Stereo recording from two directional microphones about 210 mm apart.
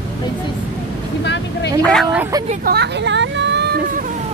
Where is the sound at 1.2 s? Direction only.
55° left (ahead or behind).